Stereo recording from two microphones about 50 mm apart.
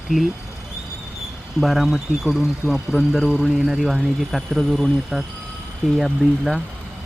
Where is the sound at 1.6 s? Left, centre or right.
Centre.